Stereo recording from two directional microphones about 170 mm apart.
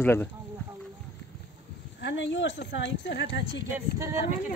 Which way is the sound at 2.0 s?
90° left.